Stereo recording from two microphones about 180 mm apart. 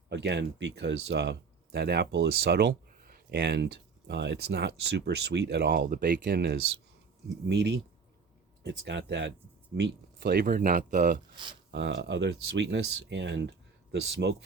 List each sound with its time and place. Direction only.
0.1 s speech: 70° right (ahead or behind); by 6.1 s 55° right (ahead or behind)
6.2 s speech: 65° right (ahead or behind); by 11.2 s 45° right (ahead or behind)
11.7 s speech: 75° right (ahead or behind)